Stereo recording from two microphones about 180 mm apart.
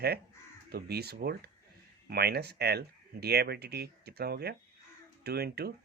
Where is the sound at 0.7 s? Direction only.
60° right (ahead or behind).